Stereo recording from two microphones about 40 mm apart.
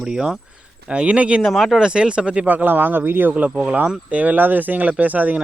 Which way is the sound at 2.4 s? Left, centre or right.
Right.